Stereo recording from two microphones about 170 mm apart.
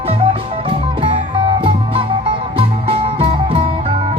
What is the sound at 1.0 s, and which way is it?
Music, 30° right (ahead or behind).